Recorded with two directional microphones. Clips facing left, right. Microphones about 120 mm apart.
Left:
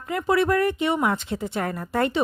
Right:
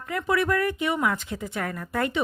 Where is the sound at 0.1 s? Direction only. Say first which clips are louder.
Left 3 dB; 30° left (ahead or behind).